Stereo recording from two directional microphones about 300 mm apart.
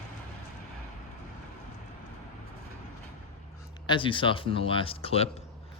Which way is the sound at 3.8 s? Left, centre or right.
Centre.